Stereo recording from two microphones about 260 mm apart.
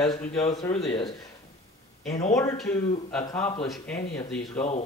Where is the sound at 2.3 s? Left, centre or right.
Centre.